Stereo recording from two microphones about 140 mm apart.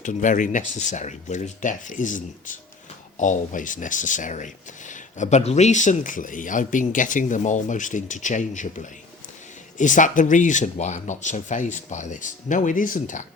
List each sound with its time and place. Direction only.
0.0 s speech: 65° left (ahead or behind)